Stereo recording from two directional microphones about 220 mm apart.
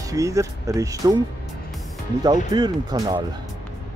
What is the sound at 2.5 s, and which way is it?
Speech, 20° right (ahead or behind).